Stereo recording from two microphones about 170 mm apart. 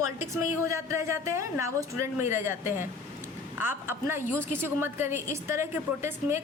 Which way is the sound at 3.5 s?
15° right (ahead or behind).